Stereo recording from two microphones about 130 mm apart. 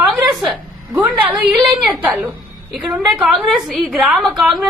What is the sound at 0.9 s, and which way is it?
A woman's voice, 10° right (ahead or behind).